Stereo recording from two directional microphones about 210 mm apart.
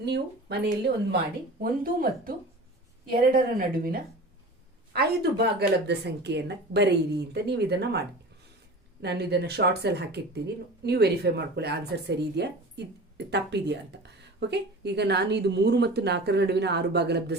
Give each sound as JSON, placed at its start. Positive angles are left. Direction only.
{"t": 0.0, "sound": "speech", "side_deg": -55}